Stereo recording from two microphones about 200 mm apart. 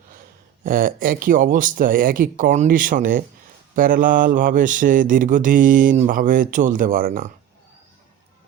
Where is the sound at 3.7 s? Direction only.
45° right (ahead or behind).